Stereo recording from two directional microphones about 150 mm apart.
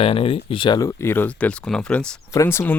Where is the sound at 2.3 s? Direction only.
20° left (ahead or behind).